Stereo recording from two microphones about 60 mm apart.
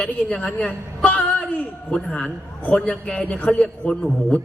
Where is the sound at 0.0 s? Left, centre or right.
Centre.